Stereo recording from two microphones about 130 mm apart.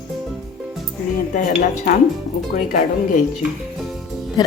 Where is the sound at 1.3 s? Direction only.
70° left (ahead or behind).